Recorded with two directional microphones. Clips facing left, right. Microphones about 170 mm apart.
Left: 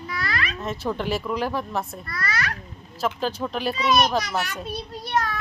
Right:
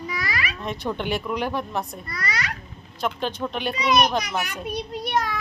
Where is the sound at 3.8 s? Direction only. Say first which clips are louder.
Right 1 dB; 15° right (ahead or behind).